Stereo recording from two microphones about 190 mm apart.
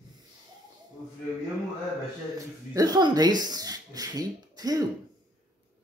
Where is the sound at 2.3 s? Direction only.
20° right (ahead or behind).